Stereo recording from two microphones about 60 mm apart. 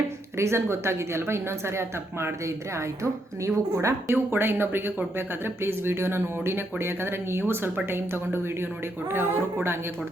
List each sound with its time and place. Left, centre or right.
0.3 s a woman's voice: right
2.7 s a woman's voice: right
4.1 s speech: right